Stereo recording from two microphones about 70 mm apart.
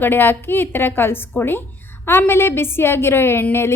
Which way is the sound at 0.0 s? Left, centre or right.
Left.